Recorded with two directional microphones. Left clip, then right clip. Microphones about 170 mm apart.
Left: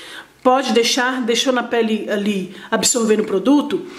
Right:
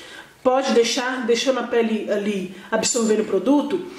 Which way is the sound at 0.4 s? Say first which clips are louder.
Left 3 dB; 30° left (ahead or behind).